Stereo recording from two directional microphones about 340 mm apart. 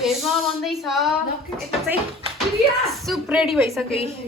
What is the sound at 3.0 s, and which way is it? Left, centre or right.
Speech, centre.